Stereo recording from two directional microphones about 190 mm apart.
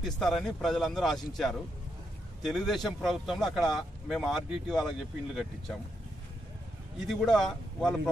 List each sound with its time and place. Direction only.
0.0 s speech: centre (ahead or behind)
7.1 s speech: 5° left (ahead or behind)